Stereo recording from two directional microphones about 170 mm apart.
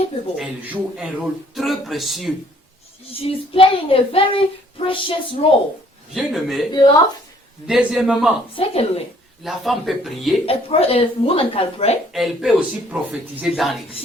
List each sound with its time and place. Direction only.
0.3 s a man's voice: 5° right (ahead or behind)
3.1 s speech: 35° left (ahead or behind)
6.1 s a man's voice: centre (ahead or behind)
7.7 s a man's voice: 5° right (ahead or behind)
8.5 s speech: 35° left (ahead or behind)
9.4 s a man's voice: centre (ahead or behind)
10.4 s speech: 35° left (ahead or behind)
12.1 s a man's voice: centre (ahead or behind)